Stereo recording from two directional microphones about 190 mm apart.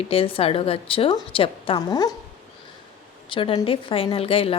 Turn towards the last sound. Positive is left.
turn(degrees=30)  # may be behind; listen again after turning